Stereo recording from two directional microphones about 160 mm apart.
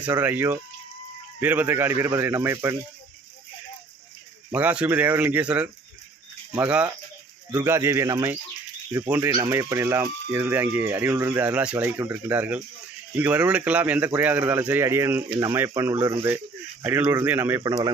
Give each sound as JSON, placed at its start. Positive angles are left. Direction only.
{"t": 0.0, "sound": "speech", "side_deg": -10}
{"t": 4.5, "sound": "speech", "side_deg": -10}
{"t": 7.5, "sound": "speech", "side_deg": -20}
{"t": 17.6, "sound": "speech", "side_deg": -25}